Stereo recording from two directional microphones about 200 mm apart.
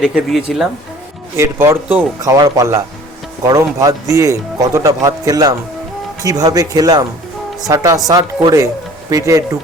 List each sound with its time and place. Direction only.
0.0 s speech: 5° right (ahead or behind)
1.4 s speech: 10° right (ahead or behind)